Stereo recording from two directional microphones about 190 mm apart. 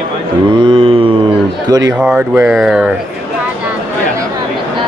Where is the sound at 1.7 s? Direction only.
20° right (ahead or behind).